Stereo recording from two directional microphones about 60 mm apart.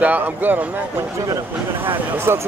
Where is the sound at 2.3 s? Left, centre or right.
Right.